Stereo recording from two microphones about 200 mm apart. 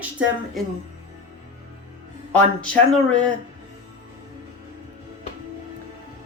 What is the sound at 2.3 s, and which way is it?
Speech, 5° left (ahead or behind).